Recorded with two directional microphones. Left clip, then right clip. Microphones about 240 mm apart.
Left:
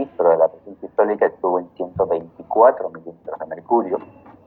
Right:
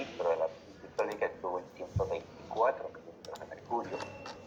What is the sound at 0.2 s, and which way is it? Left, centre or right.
Didgeridoo, left.